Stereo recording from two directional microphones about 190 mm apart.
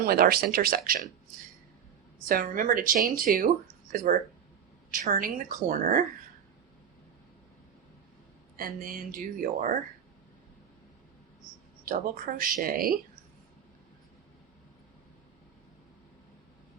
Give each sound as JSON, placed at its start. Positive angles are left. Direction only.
{"t": 0.0, "sound": "speech", "side_deg": -50}
{"t": 2.3, "sound": "speech", "side_deg": -50}
{"t": 8.5, "sound": "speech", "side_deg": -50}
{"t": 11.9, "sound": "speech", "side_deg": -50}